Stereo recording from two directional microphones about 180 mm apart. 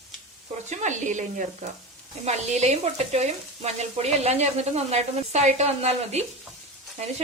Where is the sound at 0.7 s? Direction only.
40° right (ahead or behind).